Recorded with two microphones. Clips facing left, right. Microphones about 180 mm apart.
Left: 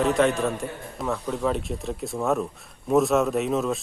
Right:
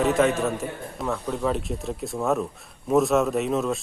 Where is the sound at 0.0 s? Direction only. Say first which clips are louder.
Even; centre (ahead or behind).